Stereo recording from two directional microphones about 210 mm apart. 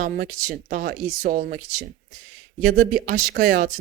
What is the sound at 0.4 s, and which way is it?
Speech, 40° right (ahead or behind).